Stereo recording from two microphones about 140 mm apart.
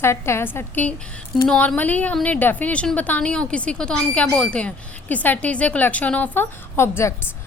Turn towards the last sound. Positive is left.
turn(degrees=15)  # may be behind; listen again after turning